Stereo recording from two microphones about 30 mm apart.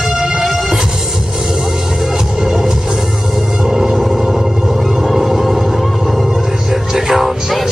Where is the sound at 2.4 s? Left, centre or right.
Centre.